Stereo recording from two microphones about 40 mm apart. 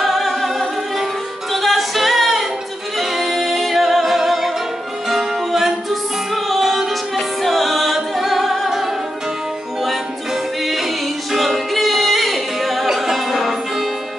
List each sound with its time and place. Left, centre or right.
0.0 s music: centre
10.6 s music: centre